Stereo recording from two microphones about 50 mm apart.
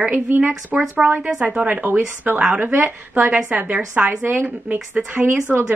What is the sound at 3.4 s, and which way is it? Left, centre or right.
A woman's voice, right.